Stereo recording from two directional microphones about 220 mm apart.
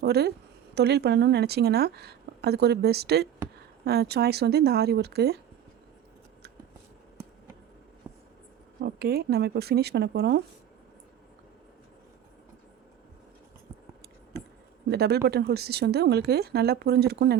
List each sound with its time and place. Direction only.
0.0 s a woman's voice: 45° right (ahead or behind)
8.1 s writing: 15° right (ahead or behind)
8.8 s a woman's voice: 45° right (ahead or behind)
14.8 s a woman's voice: 45° right (ahead or behind)